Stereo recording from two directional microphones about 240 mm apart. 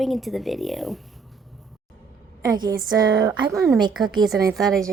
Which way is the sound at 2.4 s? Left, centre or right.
Centre.